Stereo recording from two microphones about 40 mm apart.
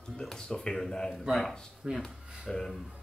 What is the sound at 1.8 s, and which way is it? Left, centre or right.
Speech, centre.